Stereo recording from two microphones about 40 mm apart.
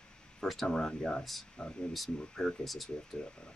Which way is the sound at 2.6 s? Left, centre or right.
Centre.